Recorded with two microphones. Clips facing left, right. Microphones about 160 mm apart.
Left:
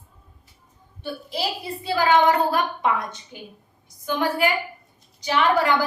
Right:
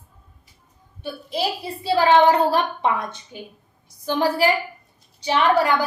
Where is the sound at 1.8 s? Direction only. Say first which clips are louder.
Right 3 dB; 30° right (ahead or behind).